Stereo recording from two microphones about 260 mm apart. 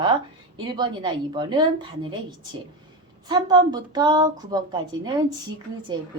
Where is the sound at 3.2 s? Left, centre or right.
Centre.